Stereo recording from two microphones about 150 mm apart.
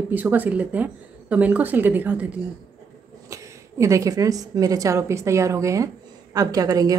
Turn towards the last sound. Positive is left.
turn(degrees=-25)  # may be behind; listen again after turning